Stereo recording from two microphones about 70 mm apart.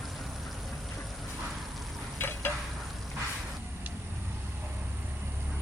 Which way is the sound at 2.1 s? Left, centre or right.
Left.